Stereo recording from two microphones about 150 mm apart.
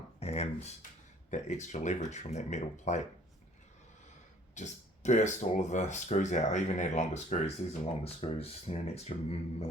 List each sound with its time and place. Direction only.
0.2 s speech: 45° left (ahead or behind)
4.5 s speech: 55° left (ahead or behind)